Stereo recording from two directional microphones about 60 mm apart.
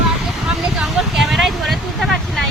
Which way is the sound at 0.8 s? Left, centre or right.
Centre.